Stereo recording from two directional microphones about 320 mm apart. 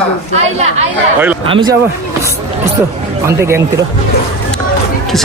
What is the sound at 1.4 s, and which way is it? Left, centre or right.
Speech, centre.